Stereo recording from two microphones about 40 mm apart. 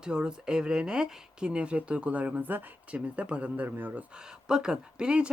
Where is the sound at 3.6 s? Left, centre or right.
Right.